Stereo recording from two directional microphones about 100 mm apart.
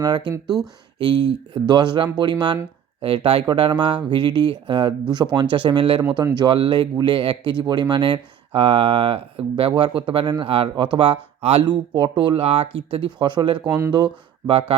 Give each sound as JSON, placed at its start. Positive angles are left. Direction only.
{"t": 0.0, "sound": "speech", "side_deg": -45}
{"t": 0.4, "sound": "speech", "side_deg": -5}
{"t": 0.9, "sound": "speech", "side_deg": -50}
{"t": 3.0, "sound": "speech", "side_deg": -70}
{"t": 3.5, "sound": "speech", "side_deg": -55}
{"t": 11.6, "sound": "speech", "side_deg": -50}